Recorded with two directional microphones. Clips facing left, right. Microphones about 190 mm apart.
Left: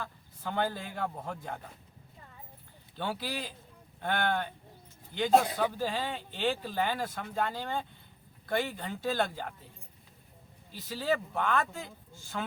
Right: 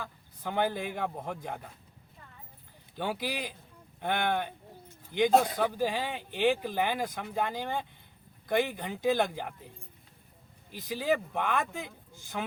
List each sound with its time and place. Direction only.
0.0 s speech: 15° right (ahead or behind)
2.9 s speech: 15° right (ahead or behind)
10.7 s speech: 15° right (ahead or behind)